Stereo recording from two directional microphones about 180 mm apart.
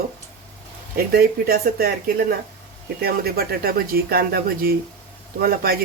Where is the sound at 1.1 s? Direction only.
55° right (ahead or behind).